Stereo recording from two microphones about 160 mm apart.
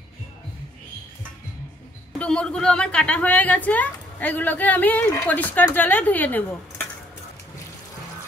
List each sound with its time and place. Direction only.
2.1 s a woman's voice: 5° left (ahead or behind)